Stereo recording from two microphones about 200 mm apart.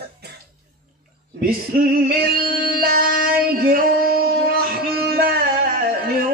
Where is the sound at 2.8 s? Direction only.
45° right (ahead or behind).